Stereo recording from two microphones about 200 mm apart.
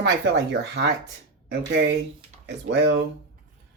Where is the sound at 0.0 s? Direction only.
55° right (ahead or behind).